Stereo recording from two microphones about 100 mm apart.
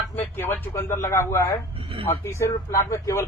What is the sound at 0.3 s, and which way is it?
A man's voice, 20° left (ahead or behind).